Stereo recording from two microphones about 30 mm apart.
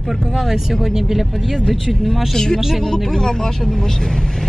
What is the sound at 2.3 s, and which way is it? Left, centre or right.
Speech, centre.